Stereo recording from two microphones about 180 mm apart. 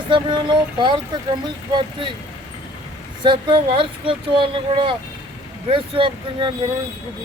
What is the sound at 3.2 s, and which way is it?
Speech, 25° right (ahead or behind).